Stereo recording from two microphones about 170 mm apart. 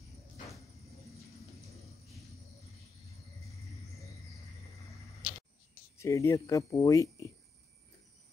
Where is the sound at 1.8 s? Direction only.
Centre (ahead or behind).